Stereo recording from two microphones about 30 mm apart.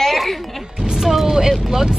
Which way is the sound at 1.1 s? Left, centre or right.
Centre.